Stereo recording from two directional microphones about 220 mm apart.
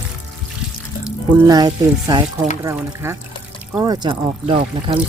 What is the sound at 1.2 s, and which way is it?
Speech, 20° right (ahead or behind).